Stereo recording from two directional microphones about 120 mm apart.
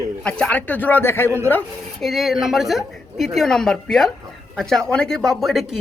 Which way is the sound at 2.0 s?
Centre (ahead or behind).